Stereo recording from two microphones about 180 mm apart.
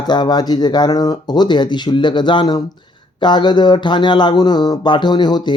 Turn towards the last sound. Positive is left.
turn(degrees=25)  # may be behind; listen again after turning